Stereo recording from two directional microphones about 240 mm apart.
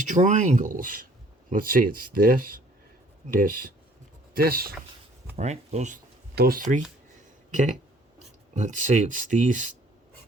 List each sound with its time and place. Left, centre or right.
0.0 s speech: right
5.4 s speech: right
6.3 s speech: right